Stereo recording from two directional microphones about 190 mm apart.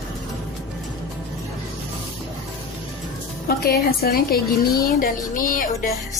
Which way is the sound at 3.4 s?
55° left (ahead or behind).